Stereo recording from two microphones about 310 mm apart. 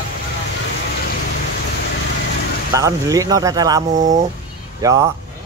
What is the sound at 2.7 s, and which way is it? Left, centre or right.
Speech, centre.